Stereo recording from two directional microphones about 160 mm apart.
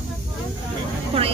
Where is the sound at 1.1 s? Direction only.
35° right (ahead or behind).